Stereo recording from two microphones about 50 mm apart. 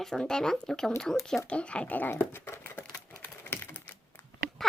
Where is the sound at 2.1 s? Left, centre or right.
Left.